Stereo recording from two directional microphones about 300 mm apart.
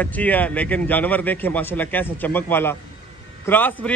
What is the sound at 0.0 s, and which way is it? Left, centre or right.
A man's voice, centre.